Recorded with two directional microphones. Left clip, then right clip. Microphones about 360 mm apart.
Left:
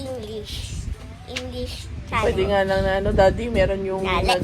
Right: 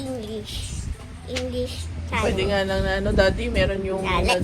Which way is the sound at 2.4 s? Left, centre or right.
Left.